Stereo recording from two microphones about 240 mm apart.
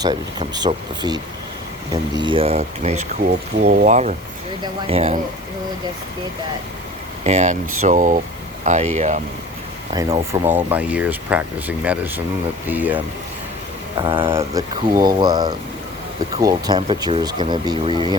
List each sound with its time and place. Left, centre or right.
0.0 s speech: centre
7.3 s speech: right
9.9 s speech: centre
14.0 s speech: centre